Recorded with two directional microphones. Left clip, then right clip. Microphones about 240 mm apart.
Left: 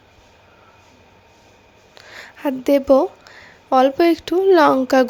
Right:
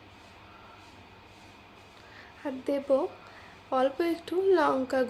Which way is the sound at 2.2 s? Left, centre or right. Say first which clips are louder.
Left 13 dB; left.